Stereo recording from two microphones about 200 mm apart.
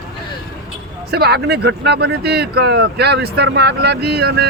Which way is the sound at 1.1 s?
55° right (ahead or behind).